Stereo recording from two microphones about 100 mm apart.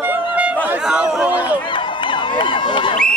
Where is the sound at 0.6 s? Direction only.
15° right (ahead or behind).